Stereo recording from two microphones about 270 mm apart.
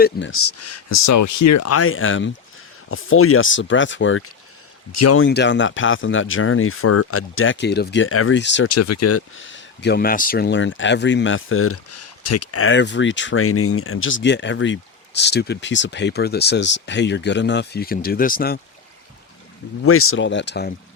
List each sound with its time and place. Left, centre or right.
0.0 s speech: left
4.9 s speech: left
8.7 s speech: left
19.8 s speech: left